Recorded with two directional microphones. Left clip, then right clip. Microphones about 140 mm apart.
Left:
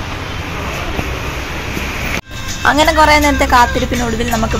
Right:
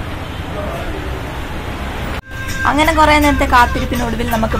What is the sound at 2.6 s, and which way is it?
Speech, 30° left (ahead or behind).